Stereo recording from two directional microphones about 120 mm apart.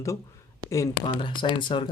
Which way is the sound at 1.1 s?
45° left (ahead or behind).